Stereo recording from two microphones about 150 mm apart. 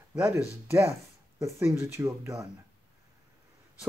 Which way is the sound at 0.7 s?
15° right (ahead or behind).